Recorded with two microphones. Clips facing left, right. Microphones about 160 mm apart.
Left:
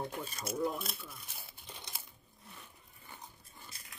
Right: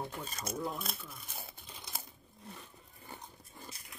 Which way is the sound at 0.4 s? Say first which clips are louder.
Left 3 dB; 45° right (ahead or behind).